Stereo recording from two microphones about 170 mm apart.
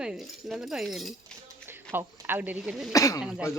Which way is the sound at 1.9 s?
10° right (ahead or behind).